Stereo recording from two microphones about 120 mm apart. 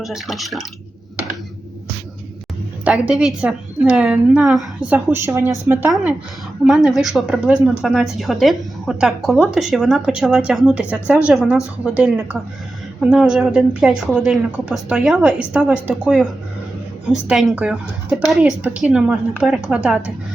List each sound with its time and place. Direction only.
0.0 s a woman's voice: centre (ahead or behind)
2.8 s a woman's voice: 10° right (ahead or behind)
4.9 s a woman's voice: 15° right (ahead or behind)
6.7 s a woman's voice: 5° right (ahead or behind)